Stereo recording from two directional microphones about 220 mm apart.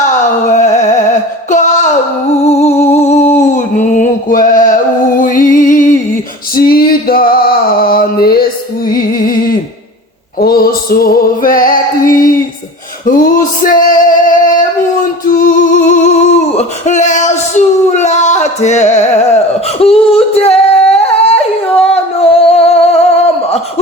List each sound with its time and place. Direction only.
0.5 s music: 35° left (ahead or behind)
1.5 s a sound: 35° left (ahead or behind)
6.6 s male singing: 40° left (ahead or behind)
8.9 s music: 40° left (ahead or behind)
14.3 s singing: 35° left (ahead or behind)
23.2 s a sound: 30° left (ahead or behind)